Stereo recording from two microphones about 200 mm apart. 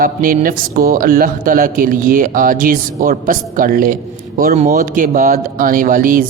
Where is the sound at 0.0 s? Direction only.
45° right (ahead or behind).